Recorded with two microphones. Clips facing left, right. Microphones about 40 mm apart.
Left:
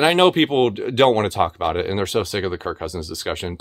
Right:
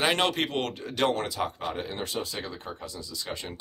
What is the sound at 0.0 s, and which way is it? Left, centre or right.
Speech, left.